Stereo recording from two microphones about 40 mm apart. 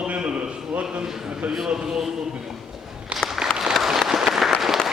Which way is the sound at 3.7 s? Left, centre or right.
Centre.